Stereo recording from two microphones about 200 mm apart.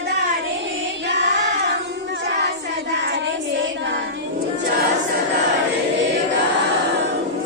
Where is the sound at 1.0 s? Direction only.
60° right (ahead or behind).